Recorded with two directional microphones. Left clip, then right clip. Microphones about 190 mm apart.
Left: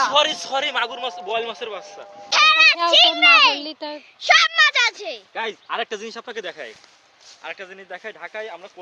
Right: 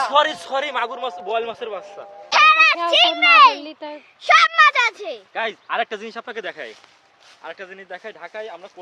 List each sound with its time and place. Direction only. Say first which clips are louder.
0.1 s a man's voice: right 1 dB; 20° right (ahead or behind)
3.6 s a child's voice: left 2 dB; 50° left (ahead or behind)
4.2 s speech: right 2 dB; 15° right (ahead or behind); by 8.7 s 5° left (ahead or behind)